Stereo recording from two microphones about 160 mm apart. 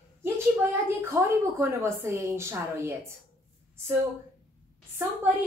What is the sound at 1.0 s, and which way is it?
A woman's voice, 15° right (ahead or behind).